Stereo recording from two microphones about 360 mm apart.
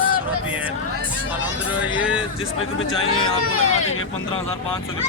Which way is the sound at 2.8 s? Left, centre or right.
Left.